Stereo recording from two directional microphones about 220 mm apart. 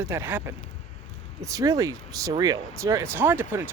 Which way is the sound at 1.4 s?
15° right (ahead or behind).